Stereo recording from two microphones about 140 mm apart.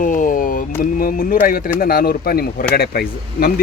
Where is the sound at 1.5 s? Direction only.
90° left.